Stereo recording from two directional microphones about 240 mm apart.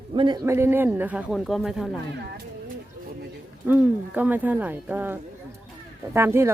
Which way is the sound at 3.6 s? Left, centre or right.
Centre.